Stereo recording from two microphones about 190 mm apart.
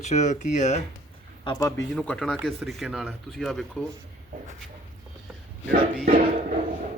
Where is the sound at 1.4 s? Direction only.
20° left (ahead or behind).